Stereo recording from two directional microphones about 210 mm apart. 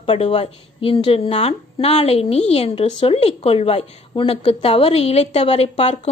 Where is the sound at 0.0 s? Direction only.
30° left (ahead or behind).